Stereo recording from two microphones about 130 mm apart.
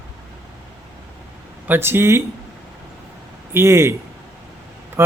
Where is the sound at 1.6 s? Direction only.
15° right (ahead or behind).